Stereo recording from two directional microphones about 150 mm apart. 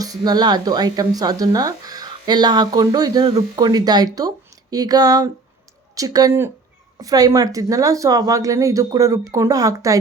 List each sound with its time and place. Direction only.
0.0 s a woman's voice: 25° right (ahead or behind)